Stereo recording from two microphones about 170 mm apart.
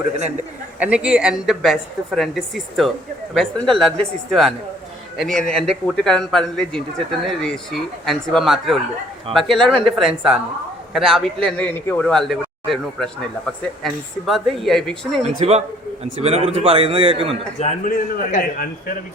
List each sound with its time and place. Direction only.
0.8 s speech: 5° right (ahead or behind)
15.2 s a man's voice: 40° right (ahead or behind)
17.6 s a man's voice: 40° left (ahead or behind)
17.9 s a man's voice: 55° left (ahead or behind)